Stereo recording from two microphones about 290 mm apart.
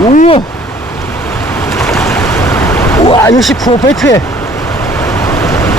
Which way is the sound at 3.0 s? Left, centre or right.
Centre.